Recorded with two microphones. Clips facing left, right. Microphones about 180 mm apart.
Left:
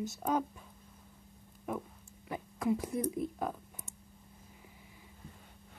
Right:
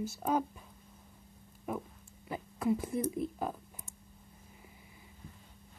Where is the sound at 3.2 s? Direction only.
Centre (ahead or behind).